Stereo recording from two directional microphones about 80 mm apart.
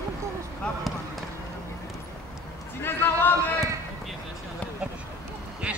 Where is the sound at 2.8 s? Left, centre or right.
Left.